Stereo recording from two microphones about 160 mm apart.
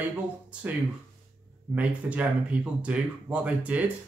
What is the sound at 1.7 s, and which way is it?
Speech, 10° right (ahead or behind).